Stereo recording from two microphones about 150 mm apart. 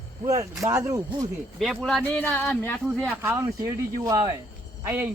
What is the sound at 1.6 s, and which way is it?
Speech, centre (ahead or behind).